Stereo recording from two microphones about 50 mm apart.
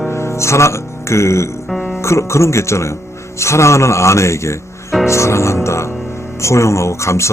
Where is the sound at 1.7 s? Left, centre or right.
Centre.